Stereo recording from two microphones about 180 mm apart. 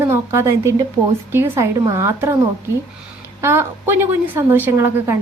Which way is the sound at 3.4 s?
15° right (ahead or behind).